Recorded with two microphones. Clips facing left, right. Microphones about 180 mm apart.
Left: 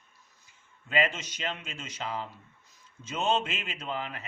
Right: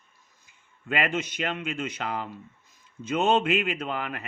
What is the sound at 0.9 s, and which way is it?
Speech, 55° right (ahead or behind).